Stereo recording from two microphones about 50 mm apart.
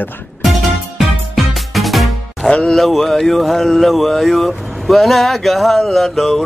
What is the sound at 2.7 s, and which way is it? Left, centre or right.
Speech, centre.